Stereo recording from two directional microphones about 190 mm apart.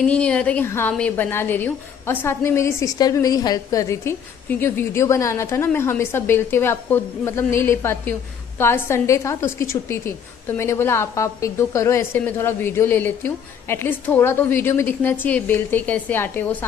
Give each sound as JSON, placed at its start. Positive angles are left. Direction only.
{"t": 0.0, "sound": "a woman's voice", "side_deg": 5}